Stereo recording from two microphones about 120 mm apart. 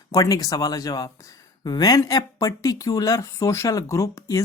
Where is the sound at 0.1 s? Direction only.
30° left (ahead or behind).